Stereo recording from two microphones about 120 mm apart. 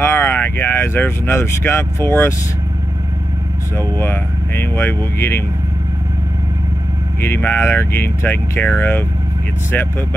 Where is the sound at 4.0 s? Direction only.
20° left (ahead or behind).